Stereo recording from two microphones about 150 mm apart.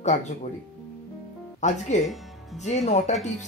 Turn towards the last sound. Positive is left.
turn(degrees=45)  # may be behind; listen again after turning